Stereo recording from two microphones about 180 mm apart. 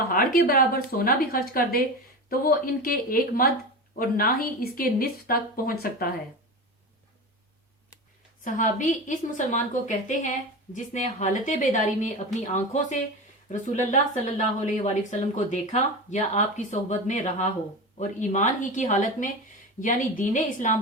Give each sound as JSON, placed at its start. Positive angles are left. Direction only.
{"t": 0.1, "sound": "speech", "side_deg": 55}
{"t": 8.4, "sound": "speech", "side_deg": 45}